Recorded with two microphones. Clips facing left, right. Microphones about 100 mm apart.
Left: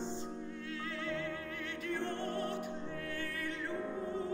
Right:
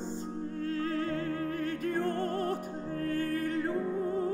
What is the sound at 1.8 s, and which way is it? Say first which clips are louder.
Music: right 5 dB; 40° right (ahead or behind).